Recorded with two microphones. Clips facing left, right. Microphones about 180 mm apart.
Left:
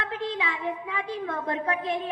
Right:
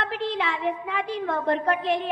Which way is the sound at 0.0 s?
75° right (ahead or behind).